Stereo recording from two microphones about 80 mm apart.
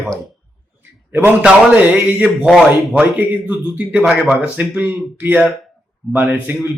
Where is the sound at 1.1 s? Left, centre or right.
Right.